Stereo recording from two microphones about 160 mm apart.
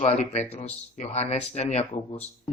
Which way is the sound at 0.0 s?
45° left (ahead or behind).